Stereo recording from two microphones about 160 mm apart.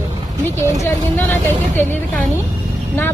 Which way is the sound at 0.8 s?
10° left (ahead or behind).